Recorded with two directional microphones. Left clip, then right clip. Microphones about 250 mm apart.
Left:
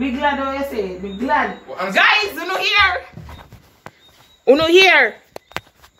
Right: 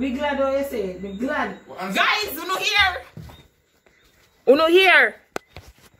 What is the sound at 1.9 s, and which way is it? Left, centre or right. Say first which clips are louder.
A woman's voice: left 6 dB; right.